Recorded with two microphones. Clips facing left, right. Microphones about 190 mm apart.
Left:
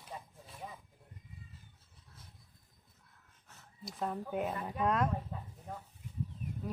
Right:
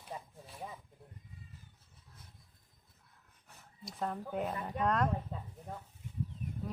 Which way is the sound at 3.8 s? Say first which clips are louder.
Left 1 dB; centre (ahead or behind).